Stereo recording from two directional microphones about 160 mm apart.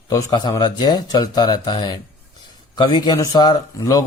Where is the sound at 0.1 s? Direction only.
20° left (ahead or behind).